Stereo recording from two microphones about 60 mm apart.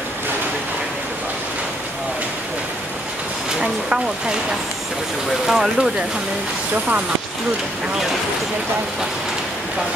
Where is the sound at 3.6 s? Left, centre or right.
Centre.